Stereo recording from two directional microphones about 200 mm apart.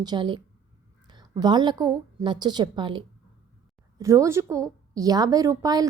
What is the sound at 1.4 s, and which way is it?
A woman's voice, 20° right (ahead or behind).